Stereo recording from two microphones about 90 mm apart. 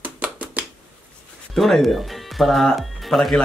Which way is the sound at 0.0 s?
15° right (ahead or behind).